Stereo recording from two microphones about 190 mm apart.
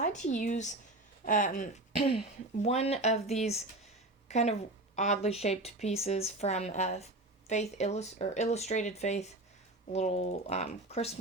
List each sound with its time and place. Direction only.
0.0 s speech: 40° left (ahead or behind)
2.0 s speech: 30° left (ahead or behind)